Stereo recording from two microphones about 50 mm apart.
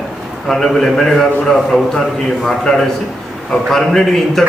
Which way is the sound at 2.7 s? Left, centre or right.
Centre.